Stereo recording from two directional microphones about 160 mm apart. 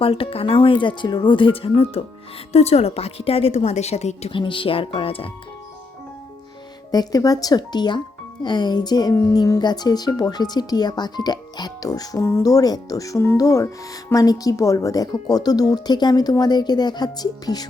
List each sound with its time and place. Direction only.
0.0 s a woman's voice: 35° left (ahead or behind)
6.9 s speech: 25° left (ahead or behind)